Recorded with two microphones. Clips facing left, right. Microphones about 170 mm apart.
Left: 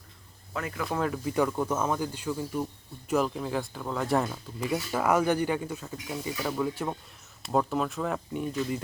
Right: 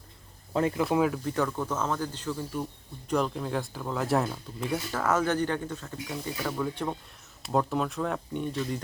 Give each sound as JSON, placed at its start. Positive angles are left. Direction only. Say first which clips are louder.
{"t": 0.5, "sound": "speech", "louder": "right 7 dB", "side_deg": -25}
{"t": 0.9, "sound": "speech", "louder": "right 4 dB", "side_deg": -5}
{"t": 1.2, "sound": "speech", "louder": "left 2 dB", "side_deg": 10}
{"t": 4.9, "sound": "speech", "louder": "left 3 dB", "side_deg": 10}